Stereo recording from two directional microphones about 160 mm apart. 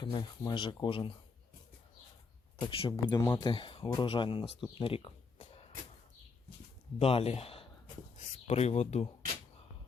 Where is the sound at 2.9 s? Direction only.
20° left (ahead or behind).